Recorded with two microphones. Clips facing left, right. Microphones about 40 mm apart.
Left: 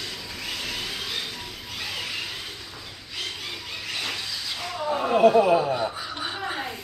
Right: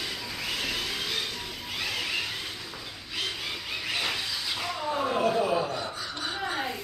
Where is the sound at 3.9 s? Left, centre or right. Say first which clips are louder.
Right 1 dB; centre.